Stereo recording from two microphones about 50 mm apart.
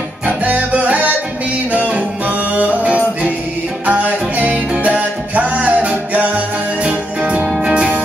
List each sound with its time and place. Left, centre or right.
0.4 s music: right